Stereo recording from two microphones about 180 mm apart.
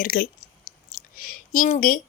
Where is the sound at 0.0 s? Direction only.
50° left (ahead or behind).